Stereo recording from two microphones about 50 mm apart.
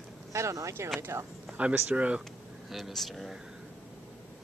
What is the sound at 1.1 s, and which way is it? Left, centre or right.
Speech, right.